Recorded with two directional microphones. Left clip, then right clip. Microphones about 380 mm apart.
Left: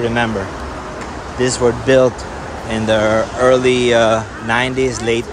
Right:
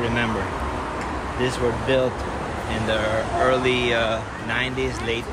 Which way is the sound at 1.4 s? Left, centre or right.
Centre.